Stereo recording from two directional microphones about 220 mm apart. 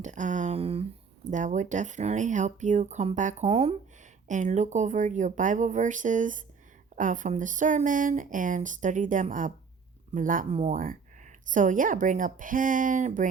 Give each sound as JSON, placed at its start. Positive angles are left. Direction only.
{"t": 0.0, "sound": "speech", "side_deg": -35}